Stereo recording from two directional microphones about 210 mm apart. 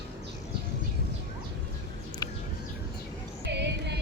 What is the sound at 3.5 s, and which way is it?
Music, 55° right (ahead or behind).